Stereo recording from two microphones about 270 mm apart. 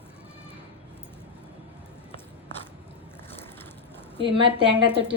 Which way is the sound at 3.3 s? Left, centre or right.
Centre.